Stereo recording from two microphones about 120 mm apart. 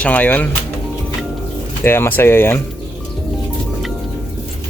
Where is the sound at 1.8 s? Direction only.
20° left (ahead or behind).